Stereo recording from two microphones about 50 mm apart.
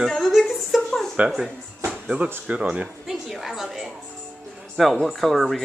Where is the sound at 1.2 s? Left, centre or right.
Right.